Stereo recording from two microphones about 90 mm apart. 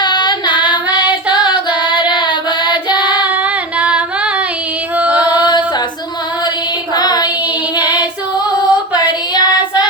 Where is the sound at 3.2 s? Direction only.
15° right (ahead or behind).